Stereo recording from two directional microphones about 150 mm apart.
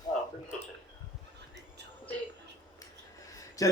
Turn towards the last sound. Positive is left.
turn(degrees=20)  # may be behind; listen again after turning